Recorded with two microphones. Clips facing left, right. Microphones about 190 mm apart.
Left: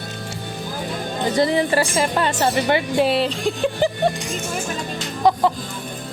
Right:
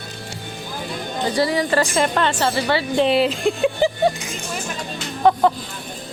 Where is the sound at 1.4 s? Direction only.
25° left (ahead or behind).